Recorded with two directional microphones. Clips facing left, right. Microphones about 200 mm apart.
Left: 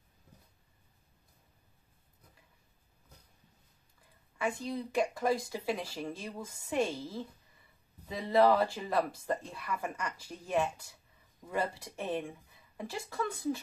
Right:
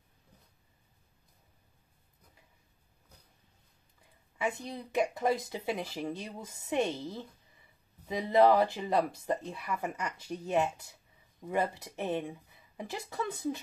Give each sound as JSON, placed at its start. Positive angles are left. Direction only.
{"t": 4.4, "sound": "speech", "side_deg": -20}